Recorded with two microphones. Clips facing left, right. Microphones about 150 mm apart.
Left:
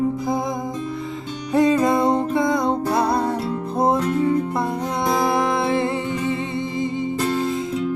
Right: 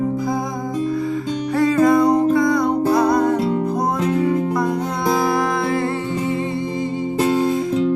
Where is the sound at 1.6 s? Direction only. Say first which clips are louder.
Right 2 dB; 20° left (ahead or behind).